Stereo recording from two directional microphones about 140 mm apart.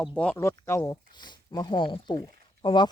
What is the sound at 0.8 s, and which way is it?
Speech, 30° left (ahead or behind).